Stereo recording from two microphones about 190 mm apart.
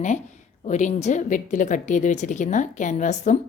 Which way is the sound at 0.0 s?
40° left (ahead or behind).